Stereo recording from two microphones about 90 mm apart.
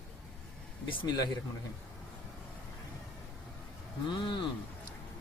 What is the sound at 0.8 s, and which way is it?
Speech, 70° left (ahead or behind).